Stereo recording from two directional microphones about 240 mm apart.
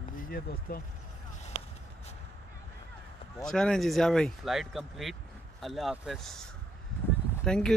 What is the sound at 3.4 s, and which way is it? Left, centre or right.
Speech, centre.